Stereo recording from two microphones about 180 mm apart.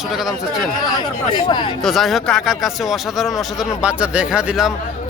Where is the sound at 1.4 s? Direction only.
25° left (ahead or behind).